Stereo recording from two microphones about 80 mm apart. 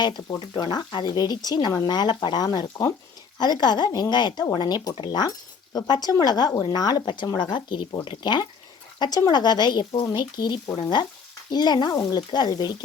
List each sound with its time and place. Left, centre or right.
0.3 s speech: left
8.0 s speech: left
9.0 s speech: left